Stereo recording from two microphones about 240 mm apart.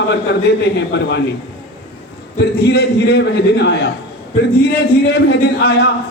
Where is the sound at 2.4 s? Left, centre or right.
Left.